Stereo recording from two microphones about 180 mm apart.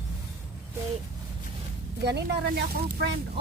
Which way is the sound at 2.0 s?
65° right (ahead or behind).